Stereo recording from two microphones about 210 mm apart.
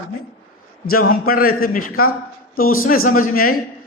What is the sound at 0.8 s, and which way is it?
A man's voice, 45° left (ahead or behind).